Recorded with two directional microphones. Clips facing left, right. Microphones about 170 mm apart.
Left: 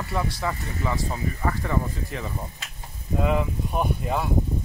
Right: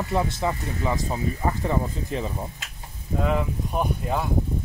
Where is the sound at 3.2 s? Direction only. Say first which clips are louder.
Even; centre (ahead or behind).